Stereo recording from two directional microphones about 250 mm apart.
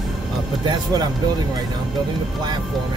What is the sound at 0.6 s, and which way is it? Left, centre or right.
Speech, centre.